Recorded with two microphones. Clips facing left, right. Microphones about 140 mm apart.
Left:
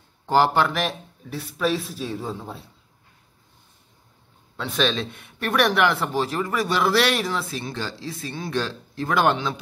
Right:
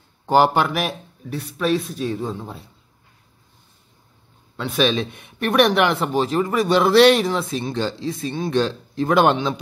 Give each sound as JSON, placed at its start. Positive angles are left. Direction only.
{"t": 0.3, "sound": "speech", "side_deg": -15}
{"t": 1.3, "sound": "speech", "side_deg": 0}
{"t": 4.6, "sound": "a man's voice", "side_deg": 0}
{"t": 4.8, "sound": "speech", "side_deg": -15}